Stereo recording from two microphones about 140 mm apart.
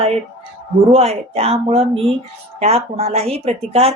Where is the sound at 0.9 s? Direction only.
45° right (ahead or behind).